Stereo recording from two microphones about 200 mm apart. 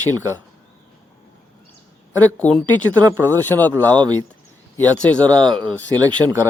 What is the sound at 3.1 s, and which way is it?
Speech, 15° right (ahead or behind).